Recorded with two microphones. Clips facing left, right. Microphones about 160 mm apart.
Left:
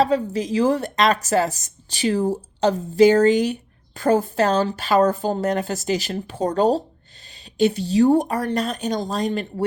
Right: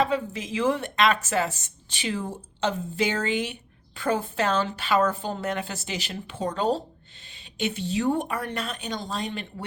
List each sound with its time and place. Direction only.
0.0 s a woman's voice: 35° left (ahead or behind)